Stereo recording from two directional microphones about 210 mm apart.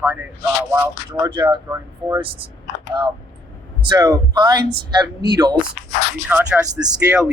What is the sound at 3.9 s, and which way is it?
Speech, 20° right (ahead or behind).